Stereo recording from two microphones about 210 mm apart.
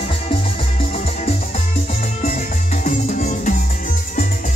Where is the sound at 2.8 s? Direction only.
35° left (ahead or behind).